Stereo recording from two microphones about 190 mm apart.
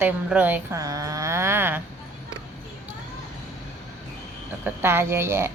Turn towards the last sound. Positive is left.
turn(degrees=-15)  # may be behind; listen again after turning